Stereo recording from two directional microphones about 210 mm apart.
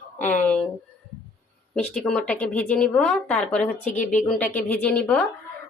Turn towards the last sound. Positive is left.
turn(degrees=5)  # may be behind; listen again after turning